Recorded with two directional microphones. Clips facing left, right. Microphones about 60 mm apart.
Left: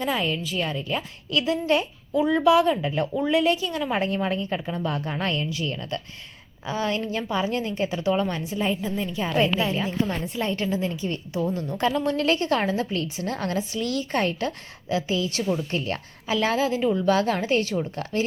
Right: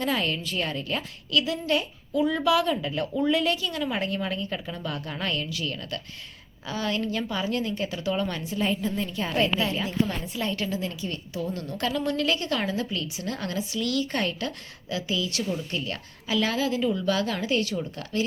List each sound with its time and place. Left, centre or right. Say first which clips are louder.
0.0 s a woman's voice: left 1 dB; centre
1.3 s a woman's voice: left 3 dB; left